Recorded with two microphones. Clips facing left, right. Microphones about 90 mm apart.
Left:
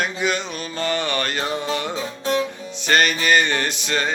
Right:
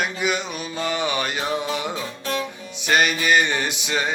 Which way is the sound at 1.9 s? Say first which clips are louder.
Left 4 dB; 25° left (ahead or behind).